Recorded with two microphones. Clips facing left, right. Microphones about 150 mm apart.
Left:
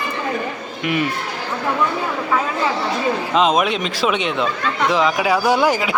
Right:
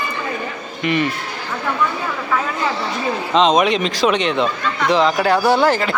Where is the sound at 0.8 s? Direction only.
5° left (ahead or behind).